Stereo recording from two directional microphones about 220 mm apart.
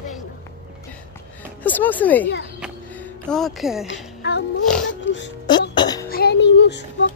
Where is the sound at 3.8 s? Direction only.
55° left (ahead or behind).